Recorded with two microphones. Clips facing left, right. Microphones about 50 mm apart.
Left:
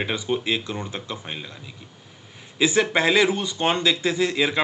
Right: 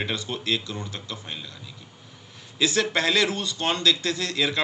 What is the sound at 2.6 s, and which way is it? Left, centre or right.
Speech, centre.